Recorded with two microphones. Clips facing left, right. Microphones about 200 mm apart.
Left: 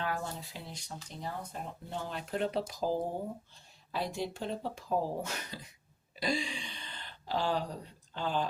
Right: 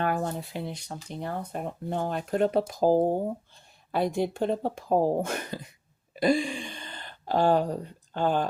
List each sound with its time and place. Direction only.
0.0 s speech: 60° right (ahead or behind)